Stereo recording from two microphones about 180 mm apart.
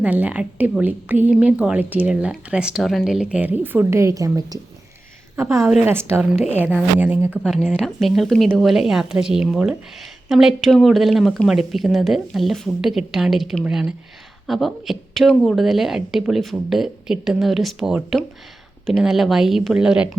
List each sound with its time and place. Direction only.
0.0 s a woman's voice: 10° right (ahead or behind)
7.4 s a woman's voice: centre (ahead or behind)